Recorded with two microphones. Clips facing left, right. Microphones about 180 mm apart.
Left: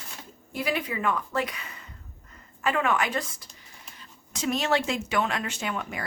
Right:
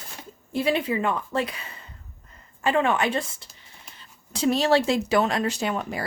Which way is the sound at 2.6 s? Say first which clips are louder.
Right 3 dB; 30° right (ahead or behind).